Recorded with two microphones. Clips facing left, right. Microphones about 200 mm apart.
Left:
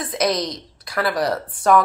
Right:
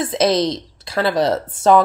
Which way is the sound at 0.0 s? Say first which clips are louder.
Right 5 dB; 25° right (ahead or behind).